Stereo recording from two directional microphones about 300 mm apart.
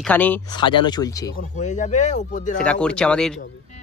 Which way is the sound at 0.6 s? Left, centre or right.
Centre.